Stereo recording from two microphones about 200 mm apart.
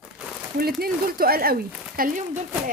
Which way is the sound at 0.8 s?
50° right (ahead or behind).